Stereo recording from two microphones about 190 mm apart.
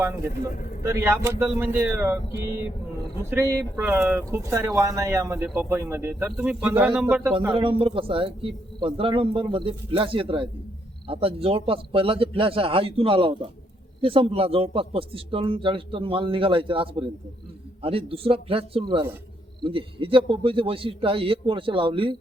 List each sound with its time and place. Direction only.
0.8 s speech: 15° right (ahead or behind)
7.5 s speech: 30° right (ahead or behind)